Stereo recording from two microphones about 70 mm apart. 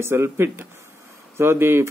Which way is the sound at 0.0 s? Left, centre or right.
Right.